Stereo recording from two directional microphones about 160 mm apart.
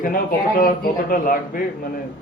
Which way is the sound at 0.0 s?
55° left (ahead or behind).